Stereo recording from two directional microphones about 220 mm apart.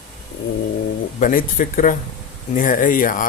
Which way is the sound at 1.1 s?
35° left (ahead or behind).